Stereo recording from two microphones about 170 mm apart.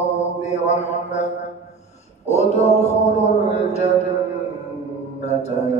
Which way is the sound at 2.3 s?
40° left (ahead or behind).